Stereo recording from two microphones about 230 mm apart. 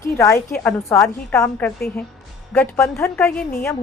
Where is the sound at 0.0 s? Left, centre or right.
Centre.